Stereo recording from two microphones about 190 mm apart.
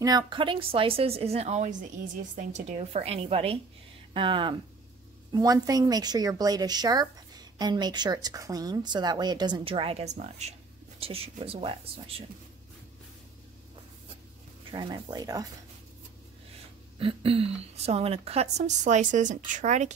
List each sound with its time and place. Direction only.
0.0 s a woman's voice: 25° right (ahead or behind)
14.7 s a woman's voice: 25° right (ahead or behind)
17.0 s speech: 30° right (ahead or behind)